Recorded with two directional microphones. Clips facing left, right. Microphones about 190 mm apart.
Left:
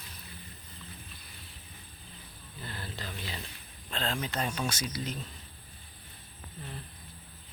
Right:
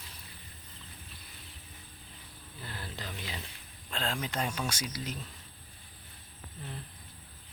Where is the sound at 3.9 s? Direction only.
10° right (ahead or behind).